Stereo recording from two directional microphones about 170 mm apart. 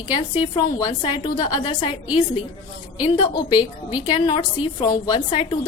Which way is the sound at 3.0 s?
30° left (ahead or behind).